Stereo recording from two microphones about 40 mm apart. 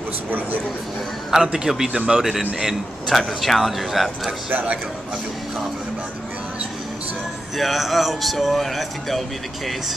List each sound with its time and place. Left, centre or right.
1.3 s a man's voice: centre
2.2 s speech: centre
7.5 s speech: centre